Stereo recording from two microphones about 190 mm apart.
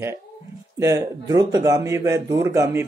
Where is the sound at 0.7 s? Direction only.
15° right (ahead or behind).